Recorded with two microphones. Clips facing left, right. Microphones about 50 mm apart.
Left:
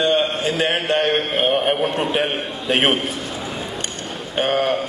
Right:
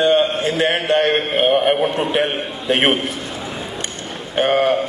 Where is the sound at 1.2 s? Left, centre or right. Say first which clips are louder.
Right 3 dB; centre.